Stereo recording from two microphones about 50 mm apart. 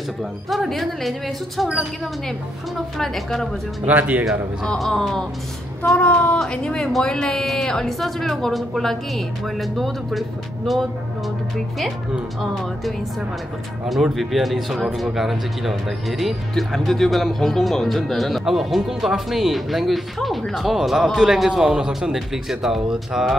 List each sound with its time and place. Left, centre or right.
0.2 s speech: centre
3.0 s speech: centre
3.8 s speech: right
4.7 s speech: centre
5.9 s speech: left
6.5 s speech: centre
12.4 s speech: centre
14.1 s speech: centre